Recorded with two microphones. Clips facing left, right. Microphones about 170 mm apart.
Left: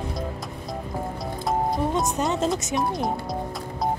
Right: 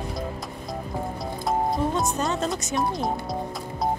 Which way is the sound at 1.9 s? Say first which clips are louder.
Left 1 dB; 20° left (ahead or behind).